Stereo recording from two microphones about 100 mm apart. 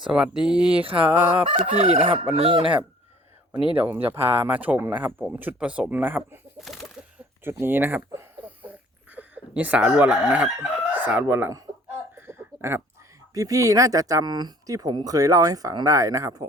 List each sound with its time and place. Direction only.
0.0 s speech: 10° right (ahead or behind)
1.5 s chicken: 90° right
2.3 s speech: 70° right (ahead or behind)
3.8 s speech: 20° right (ahead or behind)
6.7 s bird: centre (ahead or behind)
7.4 s speech: 20° right (ahead or behind)
12.1 s a sound: 25° right (ahead or behind)
13.3 s speech: 35° right (ahead or behind)